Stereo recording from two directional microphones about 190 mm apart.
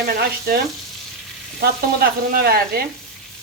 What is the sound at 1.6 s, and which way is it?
Speech, 55° right (ahead or behind).